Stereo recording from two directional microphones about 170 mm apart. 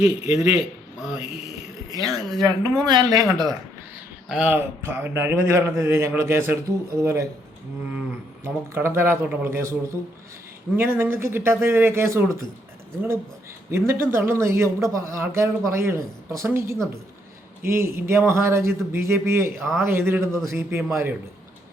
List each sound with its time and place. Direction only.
0.9 s speech: 5° right (ahead or behind)
1.9 s speech: 20° right (ahead or behind)
4.3 s a man's voice: 10° right (ahead or behind)
8.4 s a man's voice: 15° right (ahead or behind)
13.7 s a man's voice: 15° right (ahead or behind)